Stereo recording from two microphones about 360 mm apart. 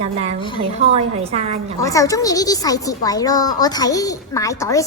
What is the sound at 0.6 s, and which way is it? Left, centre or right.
Speech, centre.